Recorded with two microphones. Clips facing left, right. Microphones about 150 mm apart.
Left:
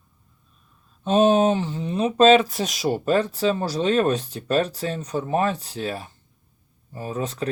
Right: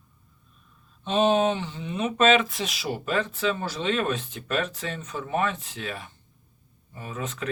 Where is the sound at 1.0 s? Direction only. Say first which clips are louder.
Left 4 dB; 45° left (ahead or behind).